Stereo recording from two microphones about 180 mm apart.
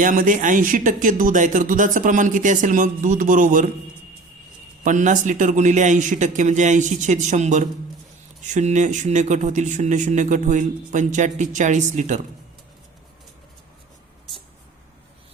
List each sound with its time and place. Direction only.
0.0 s speech: 50° right (ahead or behind)
4.8 s speech: 45° right (ahead or behind)